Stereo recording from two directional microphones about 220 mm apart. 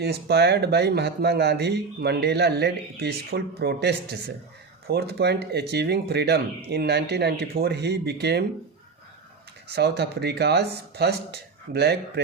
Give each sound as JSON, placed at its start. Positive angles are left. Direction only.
{"t": 0.0, "sound": "speech", "side_deg": -50}
{"t": 9.7, "sound": "speech", "side_deg": -50}